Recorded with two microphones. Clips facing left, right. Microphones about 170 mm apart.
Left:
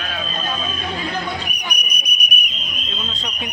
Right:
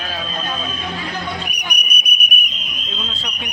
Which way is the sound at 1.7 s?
55° right (ahead or behind).